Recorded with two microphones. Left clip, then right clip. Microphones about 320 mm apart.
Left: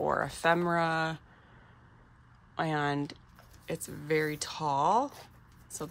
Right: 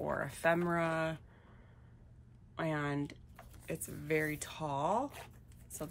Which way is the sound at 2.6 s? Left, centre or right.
Centre.